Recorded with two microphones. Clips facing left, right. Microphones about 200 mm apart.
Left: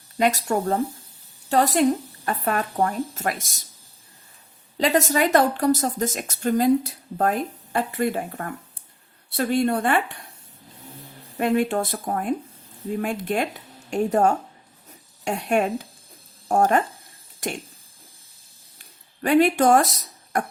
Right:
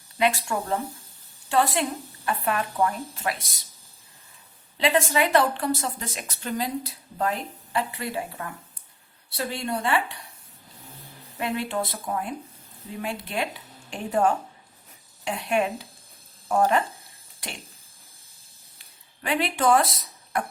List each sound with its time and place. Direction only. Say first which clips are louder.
0.2 s speech: left 3 dB; 40° left (ahead or behind)
4.8 s speech: left 2 dB; 40° left (ahead or behind)
11.3 s speech: left 7 dB; 50° left (ahead or behind)
19.2 s speech: left 7 dB; 45° left (ahead or behind)